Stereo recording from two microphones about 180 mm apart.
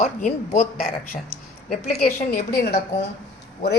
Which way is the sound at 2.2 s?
55° left (ahead or behind).